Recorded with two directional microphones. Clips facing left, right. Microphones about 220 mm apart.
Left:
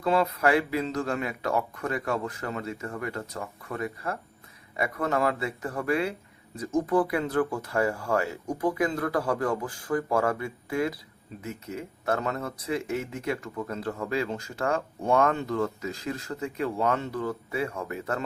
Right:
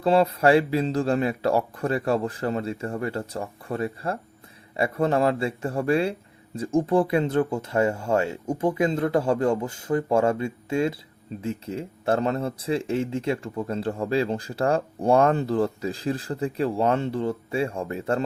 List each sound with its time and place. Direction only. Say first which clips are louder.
0.0 s speech: right 5 dB; 30° right (ahead or behind)